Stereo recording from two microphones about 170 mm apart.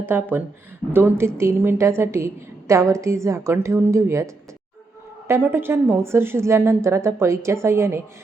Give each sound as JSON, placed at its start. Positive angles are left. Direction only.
{"t": 0.0, "sound": "a woman's voice", "side_deg": -10}
{"t": 5.3, "sound": "a woman's voice", "side_deg": -15}